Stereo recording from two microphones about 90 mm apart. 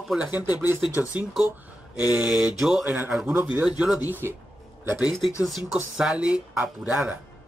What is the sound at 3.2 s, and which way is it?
Speech, 20° right (ahead or behind).